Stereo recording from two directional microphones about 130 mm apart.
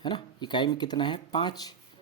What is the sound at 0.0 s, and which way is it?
Speech, 35° left (ahead or behind).